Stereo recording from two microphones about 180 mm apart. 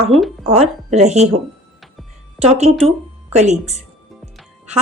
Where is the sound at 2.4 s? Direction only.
35° right (ahead or behind).